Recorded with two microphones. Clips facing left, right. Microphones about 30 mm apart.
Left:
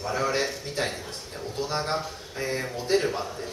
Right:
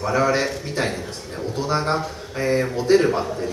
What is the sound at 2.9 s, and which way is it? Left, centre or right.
Speech, centre.